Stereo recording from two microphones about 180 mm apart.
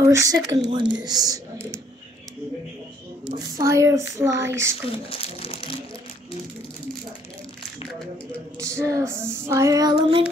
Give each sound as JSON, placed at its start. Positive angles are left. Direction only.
{"t": 0.0, "sound": "speech", "side_deg": -15}
{"t": 3.3, "sound": "child singing", "side_deg": -20}
{"t": 5.1, "sound": "speech", "side_deg": 30}
{"t": 8.5, "sound": "child singing", "side_deg": -15}